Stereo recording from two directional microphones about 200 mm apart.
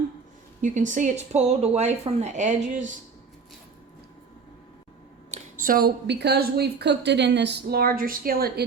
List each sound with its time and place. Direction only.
0.6 s speech: 40° right (ahead or behind)
5.3 s a woman's voice: 45° right (ahead or behind)